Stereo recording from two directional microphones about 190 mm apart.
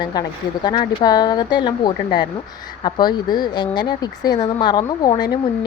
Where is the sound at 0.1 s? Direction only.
20° left (ahead or behind).